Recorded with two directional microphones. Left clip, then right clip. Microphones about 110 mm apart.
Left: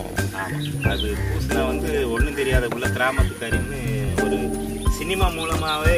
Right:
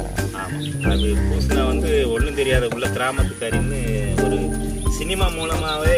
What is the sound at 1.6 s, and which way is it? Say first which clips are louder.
Speech: right 3 dB; 30° left (ahead or behind).